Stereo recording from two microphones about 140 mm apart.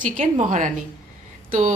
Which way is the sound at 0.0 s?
70° right (ahead or behind).